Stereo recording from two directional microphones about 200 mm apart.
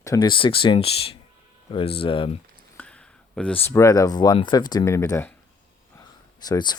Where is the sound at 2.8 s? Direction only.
5° left (ahead or behind).